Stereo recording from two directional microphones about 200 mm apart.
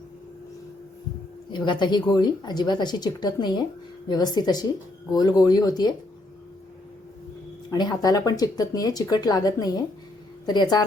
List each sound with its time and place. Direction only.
1.5 s speech: 20° left (ahead or behind)
7.7 s speech: 20° left (ahead or behind)